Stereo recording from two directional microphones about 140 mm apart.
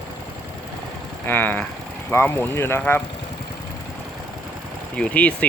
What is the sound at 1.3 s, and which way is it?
Speech, 15° left (ahead or behind).